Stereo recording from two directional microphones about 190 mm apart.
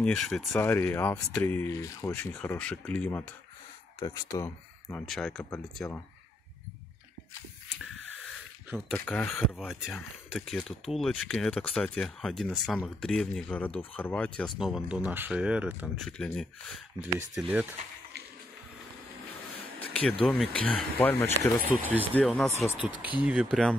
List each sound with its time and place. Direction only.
0.0 s speech: centre (ahead or behind)
0.6 s speech: 10° left (ahead or behind)
5.0 s speech: 5° left (ahead or behind)
8.6 s speech: 5° right (ahead or behind)
8.9 s speech: 10° left (ahead or behind)
9.6 s speech: 5° right (ahead or behind)
19.8 s speech: 5° left (ahead or behind)
21.8 s speech: 10° right (ahead or behind)
22.1 s speech: centre (ahead or behind)